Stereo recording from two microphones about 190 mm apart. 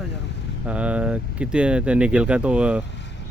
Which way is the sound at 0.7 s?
5° right (ahead or behind).